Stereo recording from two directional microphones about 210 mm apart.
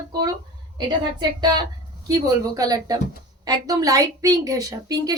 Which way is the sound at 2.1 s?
15° right (ahead or behind).